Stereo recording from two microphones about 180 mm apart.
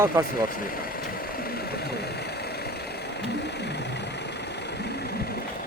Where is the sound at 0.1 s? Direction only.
15° right (ahead or behind).